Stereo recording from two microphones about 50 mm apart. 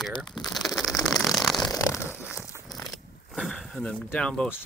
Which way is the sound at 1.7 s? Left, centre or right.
Left.